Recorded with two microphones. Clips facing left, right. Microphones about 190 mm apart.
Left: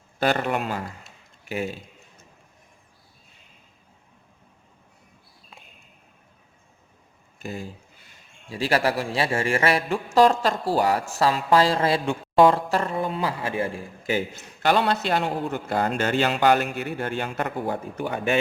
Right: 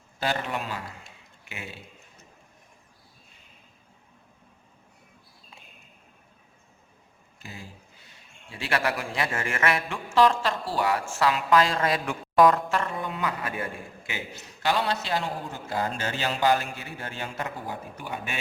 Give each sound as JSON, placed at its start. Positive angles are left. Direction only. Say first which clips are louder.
{"t": 0.2, "sound": "a man's voice", "louder": "left 6 dB", "side_deg": 55}
{"t": 1.5, "sound": "speech", "louder": "left 13 dB", "side_deg": 40}
{"t": 8.4, "sound": "a man's voice", "louder": "left 5 dB", "side_deg": 35}
{"t": 14.0, "sound": "a man's voice", "louder": "left 15 dB", "side_deg": 45}